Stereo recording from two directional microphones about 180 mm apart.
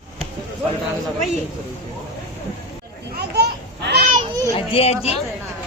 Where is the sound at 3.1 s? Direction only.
65° right (ahead or behind).